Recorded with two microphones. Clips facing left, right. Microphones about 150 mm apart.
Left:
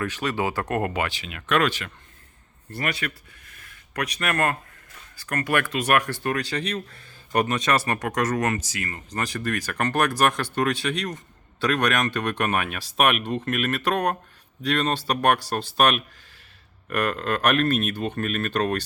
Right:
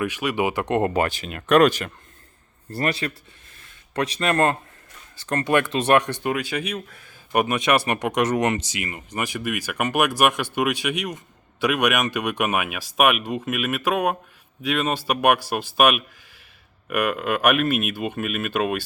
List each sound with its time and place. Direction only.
0.0 s speech: 10° right (ahead or behind)
0.9 s a man's voice: 45° right (ahead or behind); by 3.1 s 30° right (ahead or behind)
3.5 s a sound: 25° right (ahead or behind)
5.2 s speech: 25° right (ahead or behind); by 18.8 s 5° right (ahead or behind)